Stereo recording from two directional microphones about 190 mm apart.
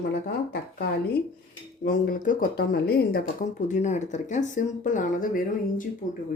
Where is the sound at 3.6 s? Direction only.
40° left (ahead or behind).